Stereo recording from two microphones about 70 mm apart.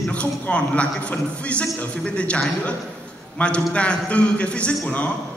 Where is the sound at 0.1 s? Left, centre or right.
Centre.